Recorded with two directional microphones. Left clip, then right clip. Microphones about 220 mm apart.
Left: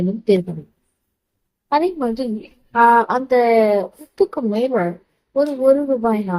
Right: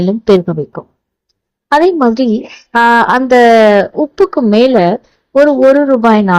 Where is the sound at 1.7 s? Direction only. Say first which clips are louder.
Right 10 dB; 35° right (ahead or behind).